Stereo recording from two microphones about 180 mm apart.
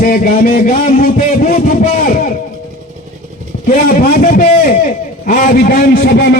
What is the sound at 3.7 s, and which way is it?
A man's voice, 50° left (ahead or behind).